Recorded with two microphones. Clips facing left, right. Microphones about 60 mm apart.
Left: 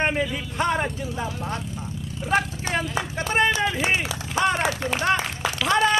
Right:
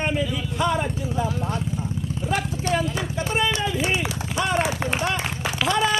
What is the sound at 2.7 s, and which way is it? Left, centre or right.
Run, left.